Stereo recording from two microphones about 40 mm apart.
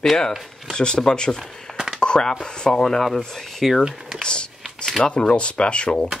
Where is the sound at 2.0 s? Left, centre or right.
Left.